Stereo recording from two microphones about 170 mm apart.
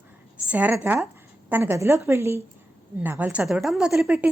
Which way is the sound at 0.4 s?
10° right (ahead or behind).